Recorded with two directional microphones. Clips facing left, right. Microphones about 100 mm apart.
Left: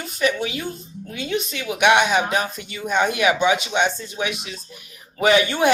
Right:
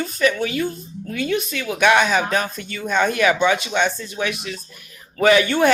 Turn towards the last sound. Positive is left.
turn(degrees=15)  # may be behind; listen again after turning